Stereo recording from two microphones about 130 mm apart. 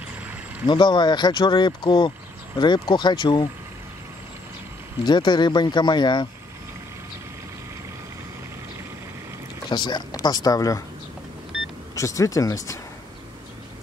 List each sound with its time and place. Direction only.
0.7 s speech: 35° left (ahead or behind)
5.0 s speech: 35° left (ahead or behind)
9.7 s speech: 35° left (ahead or behind)
11.5 s power windows: 5° right (ahead or behind)
11.9 s speech: 25° left (ahead or behind)